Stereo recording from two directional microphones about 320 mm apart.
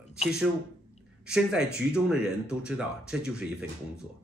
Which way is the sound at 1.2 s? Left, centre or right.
Centre.